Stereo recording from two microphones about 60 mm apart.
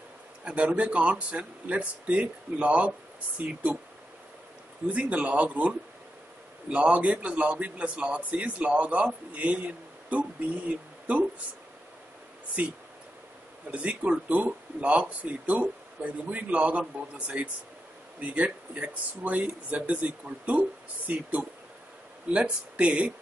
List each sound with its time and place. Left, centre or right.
0.4 s a man's voice: centre
4.8 s a man's voice: right
13.7 s a man's voice: right